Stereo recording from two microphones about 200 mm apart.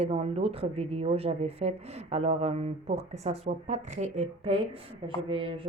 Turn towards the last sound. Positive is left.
turn(degrees=-25)  # may be behind; listen again after turning